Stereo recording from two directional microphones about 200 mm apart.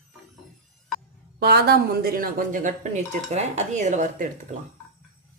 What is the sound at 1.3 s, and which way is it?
Speech, 55° right (ahead or behind).